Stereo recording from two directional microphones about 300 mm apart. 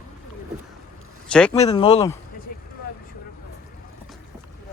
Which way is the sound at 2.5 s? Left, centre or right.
Left.